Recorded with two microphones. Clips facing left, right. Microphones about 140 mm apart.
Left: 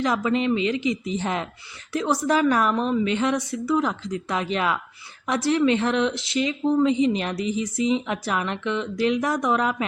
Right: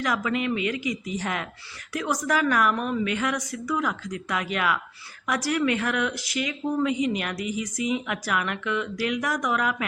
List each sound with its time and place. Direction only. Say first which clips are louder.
0.0 s speech: left 4 dB; 30° left (ahead or behind)